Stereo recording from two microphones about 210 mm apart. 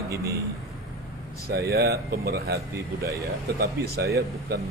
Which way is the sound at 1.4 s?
45° right (ahead or behind).